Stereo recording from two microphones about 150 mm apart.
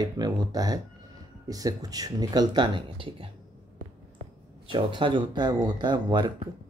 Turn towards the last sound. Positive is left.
turn(degrees=-30)  # may be behind; listen again after turning